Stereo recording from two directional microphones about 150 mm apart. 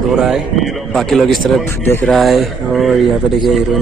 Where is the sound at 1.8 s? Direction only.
15° left (ahead or behind).